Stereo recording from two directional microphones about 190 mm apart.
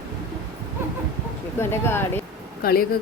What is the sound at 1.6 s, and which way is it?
Speech, 10° left (ahead or behind).